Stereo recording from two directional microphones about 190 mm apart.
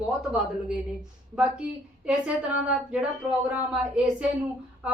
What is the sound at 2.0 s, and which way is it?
Speech, 5° right (ahead or behind).